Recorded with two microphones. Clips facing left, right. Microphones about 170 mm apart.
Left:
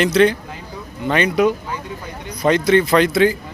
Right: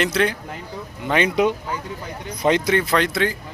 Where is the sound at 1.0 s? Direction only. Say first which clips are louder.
Left 3 dB; 15° right (ahead or behind).